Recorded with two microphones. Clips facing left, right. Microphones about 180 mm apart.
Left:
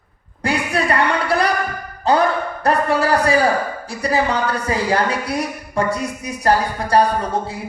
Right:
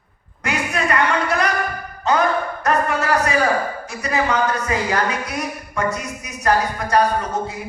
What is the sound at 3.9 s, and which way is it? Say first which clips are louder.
Speech: left 3 dB; 35° left (ahead or behind).